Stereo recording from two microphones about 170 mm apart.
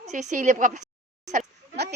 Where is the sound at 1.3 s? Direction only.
50° right (ahead or behind).